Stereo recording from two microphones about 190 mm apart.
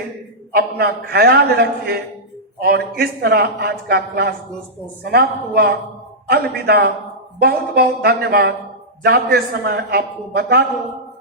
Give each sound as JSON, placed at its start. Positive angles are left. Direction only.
{"t": 0.5, "sound": "a man's voice", "side_deg": -55}